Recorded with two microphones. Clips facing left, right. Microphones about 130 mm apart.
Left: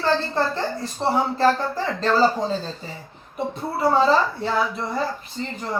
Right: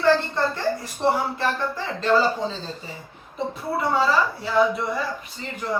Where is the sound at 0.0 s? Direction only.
30° left (ahead or behind).